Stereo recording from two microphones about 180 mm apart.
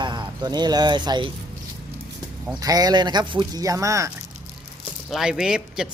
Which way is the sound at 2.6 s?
20° right (ahead or behind).